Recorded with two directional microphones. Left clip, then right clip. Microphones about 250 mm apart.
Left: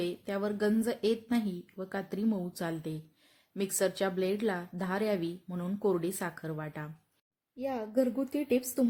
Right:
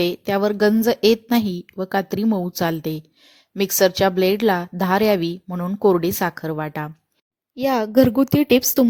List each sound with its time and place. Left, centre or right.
0.0 s a woman's voice: right